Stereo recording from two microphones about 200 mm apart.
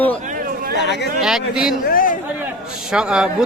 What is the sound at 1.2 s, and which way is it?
Speech, centre (ahead or behind).